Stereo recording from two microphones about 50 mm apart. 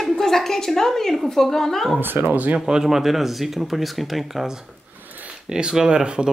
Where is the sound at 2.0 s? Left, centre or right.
Right.